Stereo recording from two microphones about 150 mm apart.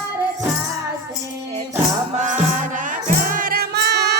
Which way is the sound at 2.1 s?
55° right (ahead or behind).